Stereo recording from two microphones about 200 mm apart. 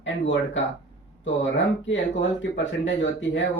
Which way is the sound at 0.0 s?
65° left (ahead or behind).